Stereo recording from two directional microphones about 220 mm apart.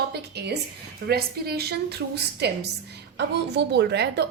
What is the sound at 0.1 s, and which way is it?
A woman's voice, 50° right (ahead or behind).